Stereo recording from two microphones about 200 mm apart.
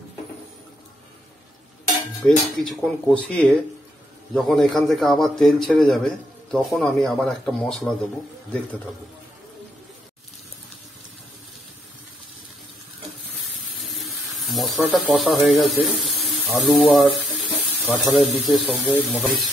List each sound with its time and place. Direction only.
2.2 s a man's voice: centre (ahead or behind)
13.8 s a sound: centre (ahead or behind)
14.9 s a man's voice: centre (ahead or behind)